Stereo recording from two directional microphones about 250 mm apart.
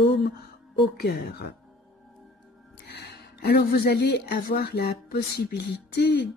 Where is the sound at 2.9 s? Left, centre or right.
Left.